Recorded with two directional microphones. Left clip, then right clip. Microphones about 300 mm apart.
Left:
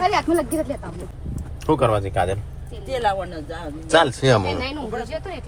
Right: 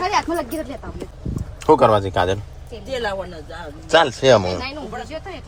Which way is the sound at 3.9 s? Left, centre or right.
Centre.